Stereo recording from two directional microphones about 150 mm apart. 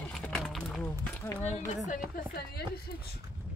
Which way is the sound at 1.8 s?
75° left (ahead or behind).